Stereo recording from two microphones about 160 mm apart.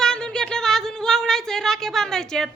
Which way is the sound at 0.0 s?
5° left (ahead or behind).